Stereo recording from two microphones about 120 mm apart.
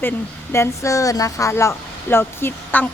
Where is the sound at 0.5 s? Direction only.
25° left (ahead or behind).